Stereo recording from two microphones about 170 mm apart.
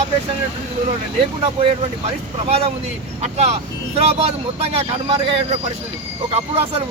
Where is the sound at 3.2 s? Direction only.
40° right (ahead or behind).